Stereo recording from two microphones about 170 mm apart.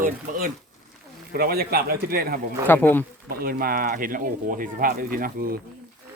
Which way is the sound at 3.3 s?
60° right (ahead or behind).